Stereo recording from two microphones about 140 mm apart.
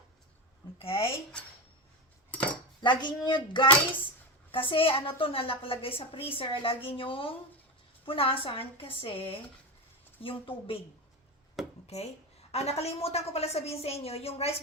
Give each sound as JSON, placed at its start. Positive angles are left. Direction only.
{"t": 0.8, "sound": "a woman's voice", "side_deg": 40}
{"t": 2.3, "sound": "cutlery", "side_deg": 10}
{"t": 2.8, "sound": "a woman's voice", "side_deg": 35}
{"t": 11.9, "sound": "a woman's voice", "side_deg": 50}